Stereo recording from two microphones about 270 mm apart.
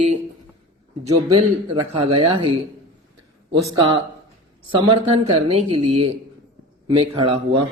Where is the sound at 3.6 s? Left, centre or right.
Centre.